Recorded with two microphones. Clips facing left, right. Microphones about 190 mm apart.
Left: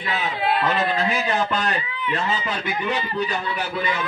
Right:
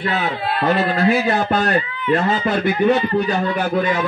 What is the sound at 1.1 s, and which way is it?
A man's voice, 40° right (ahead or behind).